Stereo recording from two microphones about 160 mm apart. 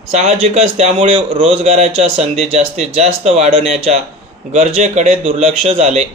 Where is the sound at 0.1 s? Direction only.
45° right (ahead or behind).